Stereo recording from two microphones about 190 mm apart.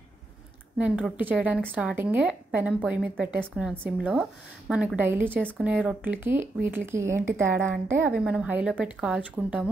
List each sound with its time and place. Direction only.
0.7 s speech: 5° right (ahead or behind)